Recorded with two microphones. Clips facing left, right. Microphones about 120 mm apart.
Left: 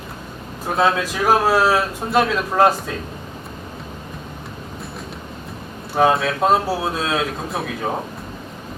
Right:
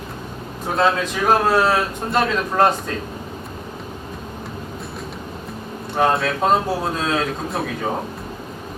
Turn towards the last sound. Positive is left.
turn(degrees=0)  # may be behind; listen again after turning